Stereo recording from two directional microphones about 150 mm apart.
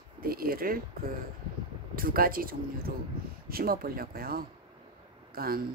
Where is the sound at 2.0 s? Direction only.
70° right (ahead or behind).